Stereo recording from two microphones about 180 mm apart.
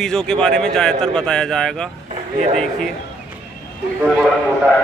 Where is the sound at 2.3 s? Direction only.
35° right (ahead or behind).